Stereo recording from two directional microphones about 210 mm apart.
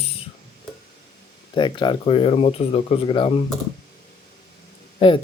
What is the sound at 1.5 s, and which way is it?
Speech, 20° left (ahead or behind).